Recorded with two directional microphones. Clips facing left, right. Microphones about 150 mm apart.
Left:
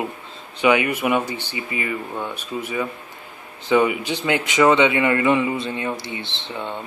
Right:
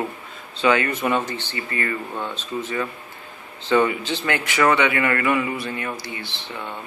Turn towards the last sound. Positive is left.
turn(degrees=20)  # may be behind; listen again after turning